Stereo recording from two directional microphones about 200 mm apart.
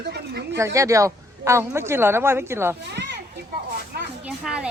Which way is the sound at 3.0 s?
60° right (ahead or behind).